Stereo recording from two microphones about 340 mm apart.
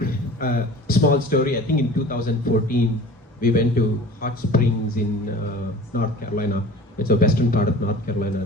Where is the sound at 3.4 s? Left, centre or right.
Left.